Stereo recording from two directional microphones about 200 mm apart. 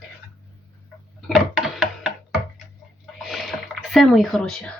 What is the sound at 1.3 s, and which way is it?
Music, centre (ahead or behind).